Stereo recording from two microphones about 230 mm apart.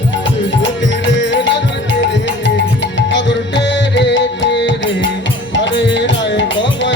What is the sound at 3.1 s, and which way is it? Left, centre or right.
Music, left.